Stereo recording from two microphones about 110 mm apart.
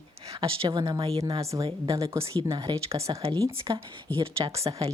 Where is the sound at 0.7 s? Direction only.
35° right (ahead or behind).